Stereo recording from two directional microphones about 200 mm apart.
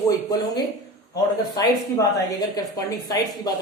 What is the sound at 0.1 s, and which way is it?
A woman's voice, 20° left (ahead or behind).